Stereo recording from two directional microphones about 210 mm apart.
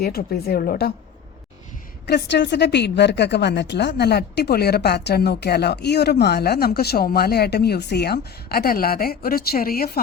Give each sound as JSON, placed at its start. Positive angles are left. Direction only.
{"t": 0.0, "sound": "a woman's voice", "side_deg": 45}
{"t": 2.0, "sound": "a woman's voice", "side_deg": 55}